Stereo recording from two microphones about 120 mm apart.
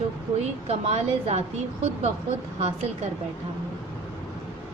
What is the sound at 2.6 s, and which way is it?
Speech, 60° right (ahead or behind).